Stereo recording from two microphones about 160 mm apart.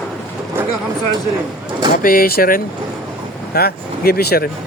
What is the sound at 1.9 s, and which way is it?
Speech, 65° left (ahead or behind).